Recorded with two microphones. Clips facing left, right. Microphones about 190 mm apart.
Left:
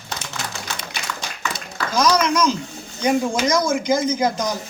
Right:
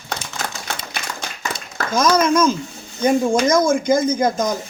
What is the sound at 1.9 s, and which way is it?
A man's voice, 50° right (ahead or behind).